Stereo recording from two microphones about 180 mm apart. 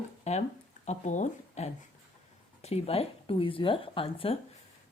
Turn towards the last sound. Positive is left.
turn(degrees=30)  # may be behind; listen again after turning